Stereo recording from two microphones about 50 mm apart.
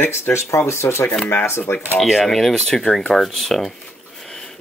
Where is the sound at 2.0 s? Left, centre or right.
Centre.